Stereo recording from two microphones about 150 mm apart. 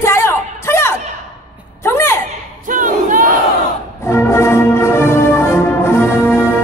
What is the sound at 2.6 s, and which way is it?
Battle cry, 60° right (ahead or behind).